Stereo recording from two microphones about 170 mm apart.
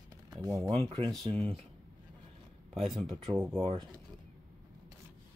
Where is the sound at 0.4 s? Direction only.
20° right (ahead or behind).